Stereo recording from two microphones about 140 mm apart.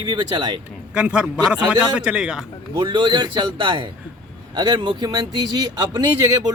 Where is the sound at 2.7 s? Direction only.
35° right (ahead or behind).